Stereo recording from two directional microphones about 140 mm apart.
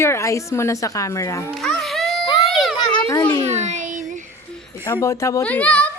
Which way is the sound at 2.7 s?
30° left (ahead or behind).